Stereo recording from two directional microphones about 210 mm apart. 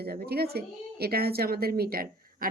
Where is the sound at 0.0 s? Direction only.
50° right (ahead or behind).